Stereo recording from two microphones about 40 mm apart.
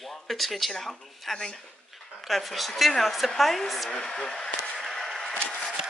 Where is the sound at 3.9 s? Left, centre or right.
Left.